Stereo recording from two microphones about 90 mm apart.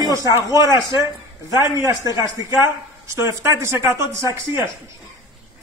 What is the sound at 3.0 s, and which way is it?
Speech, 35° right (ahead or behind).